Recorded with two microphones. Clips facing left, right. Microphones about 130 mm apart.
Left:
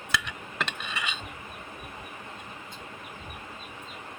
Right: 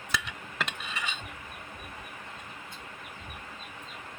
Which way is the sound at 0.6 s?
75° left (ahead or behind).